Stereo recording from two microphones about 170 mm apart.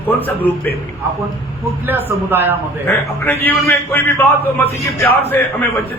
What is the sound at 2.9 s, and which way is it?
A man's voice, 15° left (ahead or behind).